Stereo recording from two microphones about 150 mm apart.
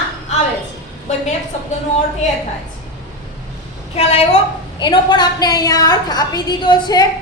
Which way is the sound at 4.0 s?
45° left (ahead or behind).